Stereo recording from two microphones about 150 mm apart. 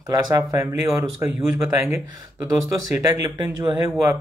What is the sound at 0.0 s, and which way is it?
Speech, 20° right (ahead or behind).